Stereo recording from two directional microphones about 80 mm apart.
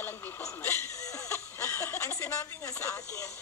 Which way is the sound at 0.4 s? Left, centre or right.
Left.